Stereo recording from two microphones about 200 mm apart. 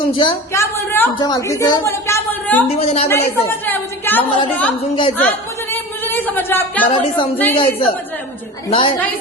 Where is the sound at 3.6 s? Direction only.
10° left (ahead or behind).